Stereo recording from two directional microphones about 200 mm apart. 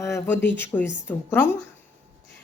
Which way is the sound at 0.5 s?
10° left (ahead or behind).